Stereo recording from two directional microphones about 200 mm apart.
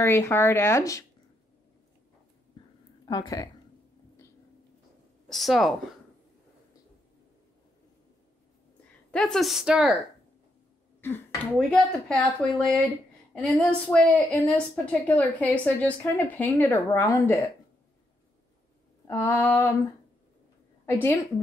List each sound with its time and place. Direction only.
0.0 s a woman's voice: 15° left (ahead or behind)
3.1 s a woman's voice: 20° left (ahead or behind)
5.3 s a woman's voice: centre (ahead or behind)
9.1 s a woman's voice: 5° left (ahead or behind)
11.0 s a woman's voice: 10° left (ahead or behind)
19.0 s a woman's voice: 15° left (ahead or behind)
20.8 s a woman's voice: 10° left (ahead or behind)